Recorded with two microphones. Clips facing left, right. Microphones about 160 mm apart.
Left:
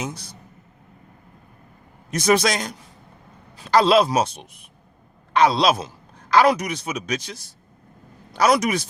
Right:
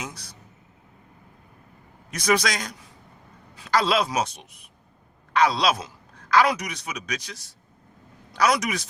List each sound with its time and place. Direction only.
2.1 s speech: 25° left (ahead or behind)
5.3 s speech: 25° left (ahead or behind)
8.4 s speech: 30° left (ahead or behind)